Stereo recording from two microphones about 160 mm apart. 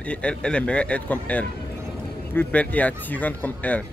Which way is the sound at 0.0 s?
5° left (ahead or behind).